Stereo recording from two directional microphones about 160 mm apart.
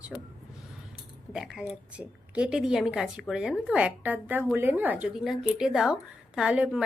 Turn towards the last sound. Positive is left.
turn(degrees=-5)  # may be behind; listen again after turning